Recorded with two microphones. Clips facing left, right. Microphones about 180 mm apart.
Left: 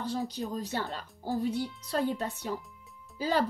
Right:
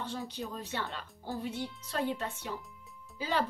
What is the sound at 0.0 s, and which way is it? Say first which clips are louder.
Speech: left 5 dB; 40° left (ahead or behind).